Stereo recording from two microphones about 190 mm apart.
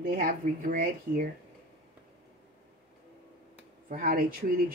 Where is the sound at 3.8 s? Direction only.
50° right (ahead or behind).